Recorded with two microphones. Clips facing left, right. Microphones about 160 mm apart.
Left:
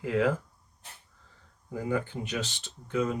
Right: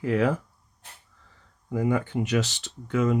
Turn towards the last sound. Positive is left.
turn(degrees=-85)